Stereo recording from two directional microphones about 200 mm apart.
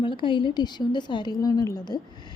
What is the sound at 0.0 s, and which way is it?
A woman's voice, 25° left (ahead or behind).